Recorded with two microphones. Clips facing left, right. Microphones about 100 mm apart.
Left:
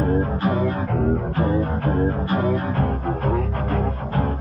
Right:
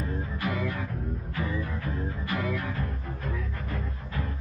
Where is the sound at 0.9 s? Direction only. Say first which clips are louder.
Left 15 dB; 75° left (ahead or behind).